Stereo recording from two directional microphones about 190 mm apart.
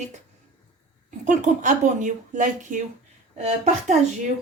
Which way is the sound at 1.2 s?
40° right (ahead or behind).